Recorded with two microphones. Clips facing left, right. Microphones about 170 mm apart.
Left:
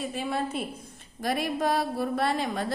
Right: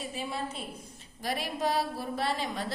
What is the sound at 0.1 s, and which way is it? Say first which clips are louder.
A woman's voice: left 6 dB; 55° left (ahead or behind).